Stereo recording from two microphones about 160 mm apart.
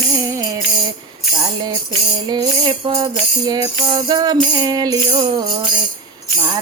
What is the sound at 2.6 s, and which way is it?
Music, 30° right (ahead or behind).